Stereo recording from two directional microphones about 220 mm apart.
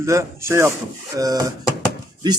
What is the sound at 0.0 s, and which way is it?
A man's voice, 15° right (ahead or behind).